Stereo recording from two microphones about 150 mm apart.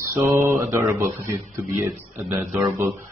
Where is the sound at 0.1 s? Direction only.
20° right (ahead or behind).